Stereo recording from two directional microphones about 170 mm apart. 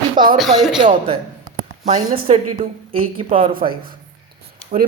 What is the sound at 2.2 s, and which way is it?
A woman's voice, 35° right (ahead or behind).